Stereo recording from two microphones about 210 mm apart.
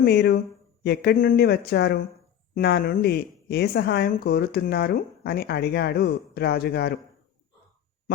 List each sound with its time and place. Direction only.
0.0 s a woman's voice: 50° left (ahead or behind)